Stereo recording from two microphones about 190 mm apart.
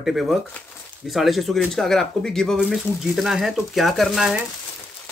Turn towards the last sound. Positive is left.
turn(degrees=-5)  # may be behind; listen again after turning